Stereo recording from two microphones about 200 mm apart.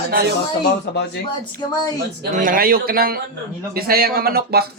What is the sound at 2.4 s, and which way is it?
A woman's voice, 45° right (ahead or behind).